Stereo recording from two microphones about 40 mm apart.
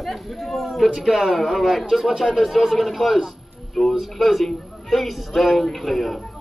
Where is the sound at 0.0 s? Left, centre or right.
Centre.